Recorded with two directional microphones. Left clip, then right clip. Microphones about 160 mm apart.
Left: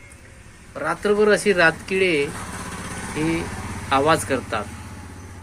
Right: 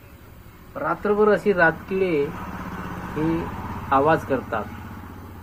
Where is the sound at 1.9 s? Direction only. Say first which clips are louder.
Left 3 dB; 35° left (ahead or behind).